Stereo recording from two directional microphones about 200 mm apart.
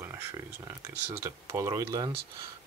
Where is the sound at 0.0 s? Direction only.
10° right (ahead or behind).